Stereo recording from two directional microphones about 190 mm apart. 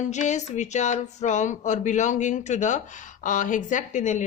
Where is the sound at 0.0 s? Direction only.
40° left (ahead or behind).